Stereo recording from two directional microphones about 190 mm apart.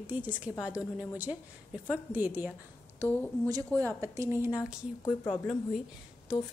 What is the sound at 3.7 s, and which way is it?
Speech, 15° right (ahead or behind).